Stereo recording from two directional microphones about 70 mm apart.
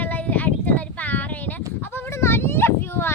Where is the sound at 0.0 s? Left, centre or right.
Left.